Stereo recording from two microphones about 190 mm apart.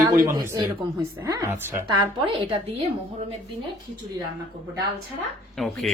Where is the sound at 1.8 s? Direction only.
20° right (ahead or behind).